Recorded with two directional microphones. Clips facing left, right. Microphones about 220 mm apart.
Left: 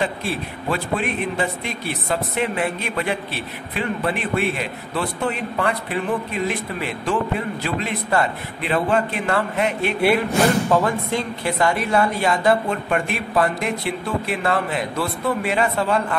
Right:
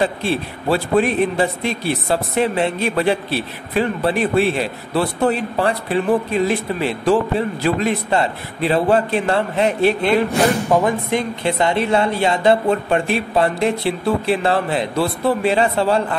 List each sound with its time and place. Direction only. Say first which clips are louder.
0.0 s speech: right 5 dB; 30° right (ahead or behind)
10.4 s speech: right 2 dB; 15° right (ahead or behind)